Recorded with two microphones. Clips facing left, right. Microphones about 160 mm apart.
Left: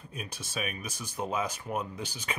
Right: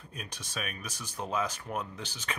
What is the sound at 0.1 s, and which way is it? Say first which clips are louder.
Speech: left 3 dB; 5° left (ahead or behind).